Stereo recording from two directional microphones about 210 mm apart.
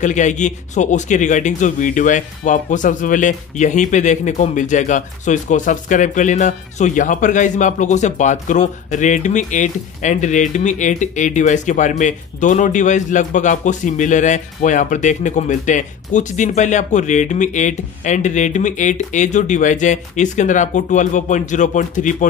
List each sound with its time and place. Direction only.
0.0 s a man's voice: 35° left (ahead or behind)